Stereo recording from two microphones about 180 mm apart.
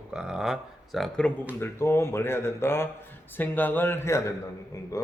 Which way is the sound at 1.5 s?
15° left (ahead or behind).